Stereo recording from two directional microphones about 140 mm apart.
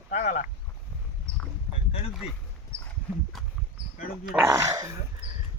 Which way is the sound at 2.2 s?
45° left (ahead or behind).